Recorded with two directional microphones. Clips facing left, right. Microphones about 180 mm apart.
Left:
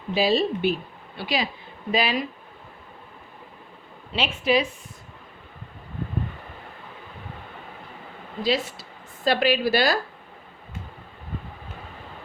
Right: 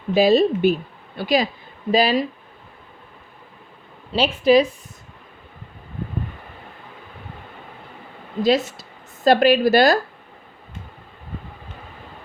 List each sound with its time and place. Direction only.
0.1 s speech: 45° right (ahead or behind)
4.1 s speech: 40° right (ahead or behind)
8.4 s a woman's voice: 45° right (ahead or behind)